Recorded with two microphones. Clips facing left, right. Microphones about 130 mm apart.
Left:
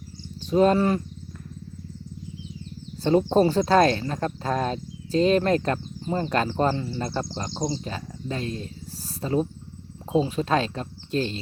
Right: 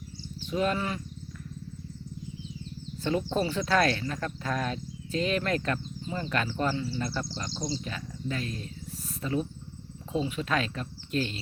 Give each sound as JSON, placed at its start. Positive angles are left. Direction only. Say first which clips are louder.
{"t": 0.5, "sound": "speech", "louder": "left 9 dB", "side_deg": 35}
{"t": 3.0, "sound": "speech", "louder": "left 9 dB", "side_deg": 35}
{"t": 7.9, "sound": "speech", "louder": "left 3 dB", "side_deg": 35}